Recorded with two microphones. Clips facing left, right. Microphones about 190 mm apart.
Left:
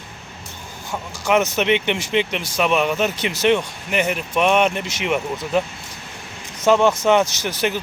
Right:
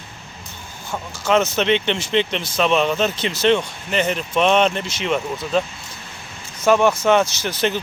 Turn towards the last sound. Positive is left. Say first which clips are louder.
# right 1 dB
turn(degrees=15)  # may be behind; listen again after turning